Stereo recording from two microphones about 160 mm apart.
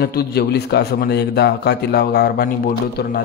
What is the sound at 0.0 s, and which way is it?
A man's voice, 80° left.